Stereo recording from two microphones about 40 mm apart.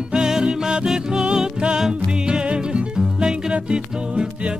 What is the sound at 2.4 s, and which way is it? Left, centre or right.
Music, right.